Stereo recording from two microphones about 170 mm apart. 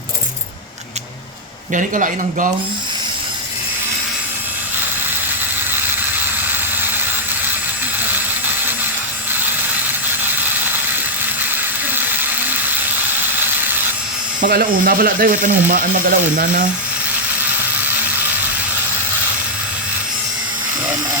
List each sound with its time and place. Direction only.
1.7 s speech: 50° right (ahead or behind)
14.4 s speech: 60° right (ahead or behind)